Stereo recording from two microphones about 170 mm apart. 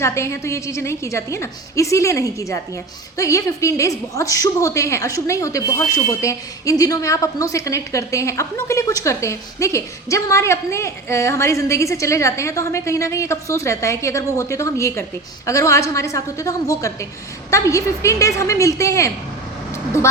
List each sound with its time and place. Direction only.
0.0 s a woman's voice: 15° left (ahead or behind)